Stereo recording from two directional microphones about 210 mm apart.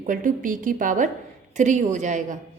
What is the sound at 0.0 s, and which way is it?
A woman's voice, 40° right (ahead or behind).